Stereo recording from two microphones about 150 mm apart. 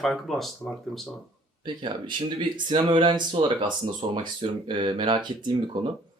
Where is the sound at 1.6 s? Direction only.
30° right (ahead or behind).